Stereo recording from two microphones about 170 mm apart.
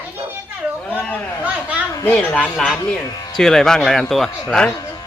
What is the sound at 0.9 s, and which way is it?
Speech, 10° left (ahead or behind).